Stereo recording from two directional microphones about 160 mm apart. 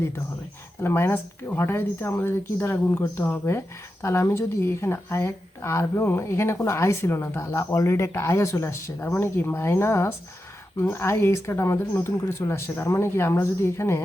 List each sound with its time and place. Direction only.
0.8 s speech: 15° left (ahead or behind)